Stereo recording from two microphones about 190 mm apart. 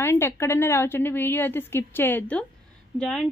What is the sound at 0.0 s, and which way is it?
A woman's voice, 15° left (ahead or behind).